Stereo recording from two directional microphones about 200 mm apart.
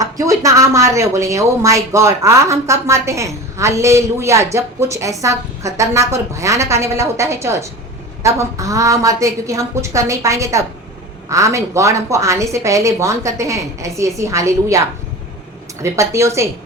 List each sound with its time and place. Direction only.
0.0 s a woman's voice: 15° right (ahead or behind)
15.8 s a woman's voice: 15° right (ahead or behind)